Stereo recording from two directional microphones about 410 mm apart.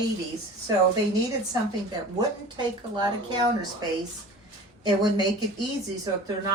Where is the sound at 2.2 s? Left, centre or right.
Centre.